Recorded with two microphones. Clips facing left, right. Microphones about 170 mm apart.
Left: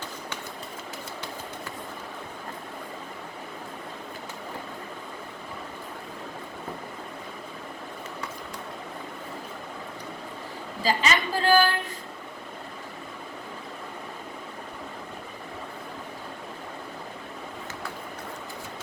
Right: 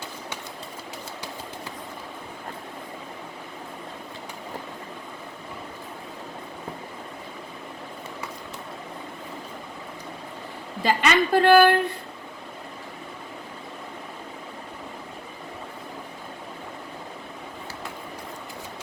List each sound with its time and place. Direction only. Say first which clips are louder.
10.8 s speech: right 4 dB; 60° right (ahead or behind)